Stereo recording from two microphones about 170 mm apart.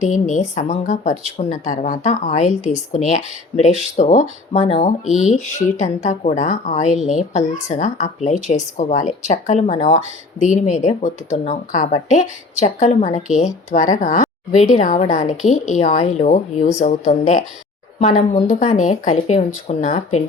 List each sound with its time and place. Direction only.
0.0 s speech: 45° left (ahead or behind)